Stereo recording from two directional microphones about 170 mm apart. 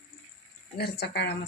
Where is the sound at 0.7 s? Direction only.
70° left (ahead or behind).